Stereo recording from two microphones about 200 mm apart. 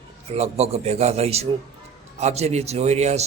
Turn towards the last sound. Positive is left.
turn(degrees=-35)  # may be behind; listen again after turning